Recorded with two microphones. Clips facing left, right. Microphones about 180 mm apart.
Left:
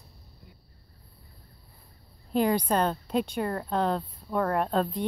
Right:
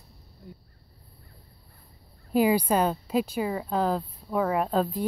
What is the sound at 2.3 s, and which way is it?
A woman's voice, 5° right (ahead or behind).